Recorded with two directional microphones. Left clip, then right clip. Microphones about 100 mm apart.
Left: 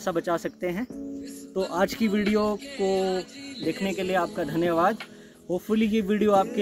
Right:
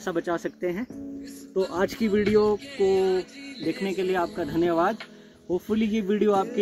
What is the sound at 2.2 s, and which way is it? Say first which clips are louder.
Music: right 5 dB; 5° left (ahead or behind).